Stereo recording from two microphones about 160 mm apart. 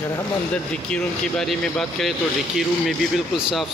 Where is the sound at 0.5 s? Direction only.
5° left (ahead or behind).